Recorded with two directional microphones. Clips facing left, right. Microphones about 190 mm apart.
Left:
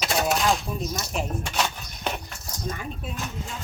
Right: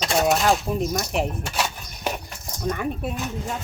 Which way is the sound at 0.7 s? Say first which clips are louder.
Right 6 dB; 60° right (ahead or behind).